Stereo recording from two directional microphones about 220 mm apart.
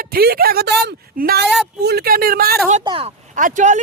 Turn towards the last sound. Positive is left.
turn(degrees=-35)  # may be behind; listen again after turning